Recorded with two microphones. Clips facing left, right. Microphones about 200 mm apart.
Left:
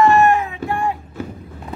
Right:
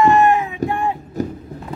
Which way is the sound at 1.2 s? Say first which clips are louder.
Right 6 dB; 40° right (ahead or behind).